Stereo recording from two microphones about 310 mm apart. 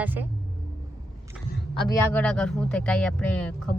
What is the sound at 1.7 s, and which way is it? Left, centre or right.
Speech, centre.